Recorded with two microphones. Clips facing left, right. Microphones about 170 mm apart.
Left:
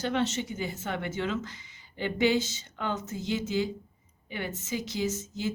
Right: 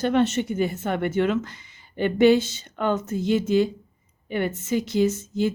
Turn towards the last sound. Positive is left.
turn(degrees=-55)  # may be behind; listen again after turning